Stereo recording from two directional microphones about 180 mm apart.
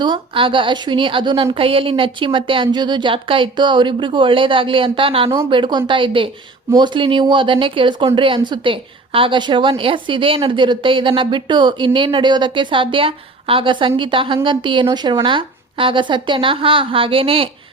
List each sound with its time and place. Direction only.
0.0 s a woman's voice: 25° right (ahead or behind)